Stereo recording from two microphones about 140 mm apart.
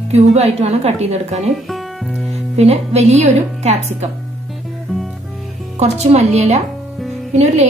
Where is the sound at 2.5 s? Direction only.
50° right (ahead or behind).